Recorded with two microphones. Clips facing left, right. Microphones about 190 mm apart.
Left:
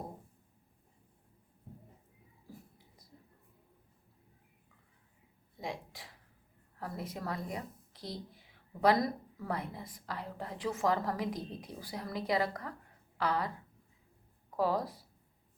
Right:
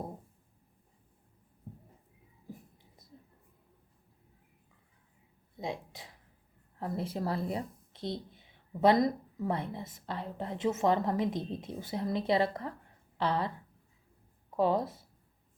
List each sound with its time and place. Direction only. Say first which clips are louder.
2.5 s whispering: right 4 dB; 20° right (ahead or behind)
5.5 s a sound: right 3 dB; 20° right (ahead or behind)
6.7 s a woman's voice: right 6 dB; 25° right (ahead or behind)
14.5 s a woman's voice: right 3 dB; 25° right (ahead or behind)